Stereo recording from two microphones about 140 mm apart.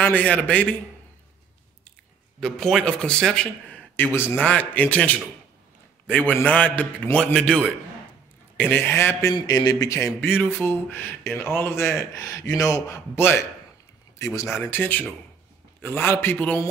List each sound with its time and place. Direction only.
0.0 s speech: 10° left (ahead or behind)
2.4 s speech: 5° left (ahead or behind)